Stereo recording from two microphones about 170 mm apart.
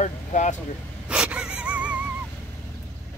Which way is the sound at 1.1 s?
5° right (ahead or behind).